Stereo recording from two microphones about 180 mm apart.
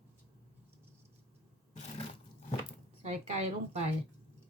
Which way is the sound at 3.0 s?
40° right (ahead or behind).